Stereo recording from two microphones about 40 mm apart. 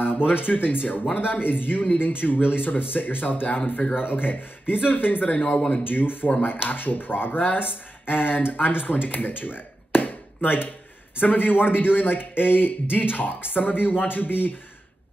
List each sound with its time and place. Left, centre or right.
0.2 s speech: left
3.4 s speech: left
3.9 s speech: left
5.9 s speech: left
8.1 s speech: left